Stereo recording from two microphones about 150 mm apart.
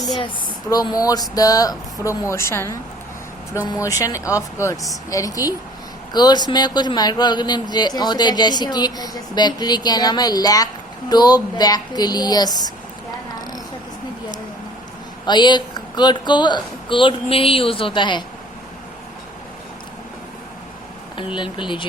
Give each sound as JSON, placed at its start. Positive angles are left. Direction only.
{"t": 0.7, "sound": "speech", "side_deg": 25}
{"t": 15.3, "sound": "speech", "side_deg": 30}
{"t": 21.2, "sound": "speech", "side_deg": 35}